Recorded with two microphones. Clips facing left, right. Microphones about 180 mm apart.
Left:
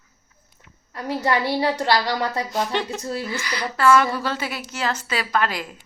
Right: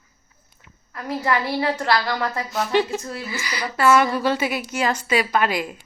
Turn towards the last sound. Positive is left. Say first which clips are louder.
# right 2 dB
turn(degrees=-10)  # may be behind; listen again after turning